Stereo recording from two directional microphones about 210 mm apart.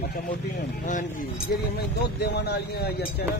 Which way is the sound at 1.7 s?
50° left (ahead or behind).